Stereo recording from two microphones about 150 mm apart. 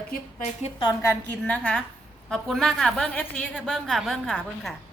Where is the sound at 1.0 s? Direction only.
15° left (ahead or behind).